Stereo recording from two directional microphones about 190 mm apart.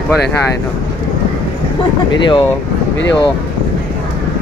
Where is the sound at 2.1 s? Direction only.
25° left (ahead or behind).